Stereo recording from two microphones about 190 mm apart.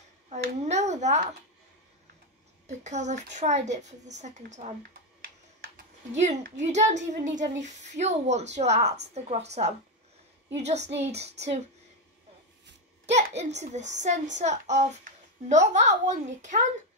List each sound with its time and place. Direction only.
0.3 s speech: 35° right (ahead or behind)
2.6 s a child's voice: 40° right (ahead or behind)
6.1 s a child's voice: 40° right (ahead or behind)
10.8 s a child's voice: 65° right (ahead or behind)
11.1 s a child's voice: 35° right (ahead or behind)
13.0 s a child's voice: 35° right (ahead or behind)